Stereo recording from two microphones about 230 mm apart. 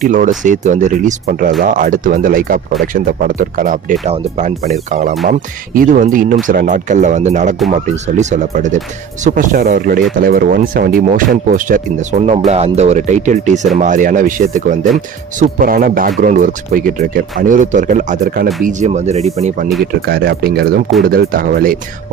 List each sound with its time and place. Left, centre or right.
0.0 s speech: right
19.8 s speech: right